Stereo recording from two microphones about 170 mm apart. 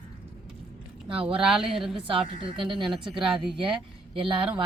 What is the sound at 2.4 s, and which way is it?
Speech, 30° right (ahead or behind).